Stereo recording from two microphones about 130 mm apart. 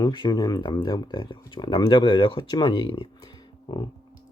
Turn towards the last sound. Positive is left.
turn(degrees=35)  # may be behind; listen again after turning